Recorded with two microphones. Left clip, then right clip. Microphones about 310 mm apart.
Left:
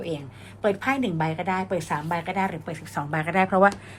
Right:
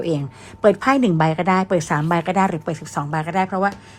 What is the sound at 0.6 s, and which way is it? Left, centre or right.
Speech, centre.